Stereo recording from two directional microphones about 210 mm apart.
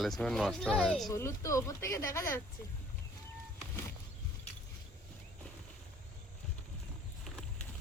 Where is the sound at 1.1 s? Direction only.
15° left (ahead or behind).